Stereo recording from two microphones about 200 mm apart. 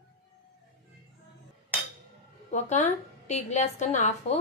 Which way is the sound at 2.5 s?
35° left (ahead or behind).